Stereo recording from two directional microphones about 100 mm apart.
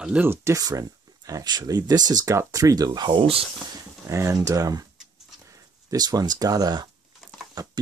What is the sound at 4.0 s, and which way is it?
Speech, 30° right (ahead or behind).